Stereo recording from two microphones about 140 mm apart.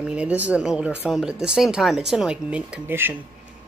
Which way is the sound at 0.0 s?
10° right (ahead or behind).